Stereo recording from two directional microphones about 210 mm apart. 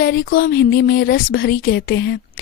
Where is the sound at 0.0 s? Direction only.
45° left (ahead or behind).